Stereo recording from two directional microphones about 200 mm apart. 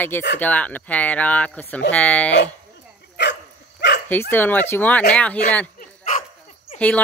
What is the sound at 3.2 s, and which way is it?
Dog, 60° left (ahead or behind).